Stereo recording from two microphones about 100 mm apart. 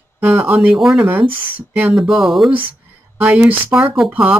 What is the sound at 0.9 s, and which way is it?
Speech, 25° right (ahead or behind).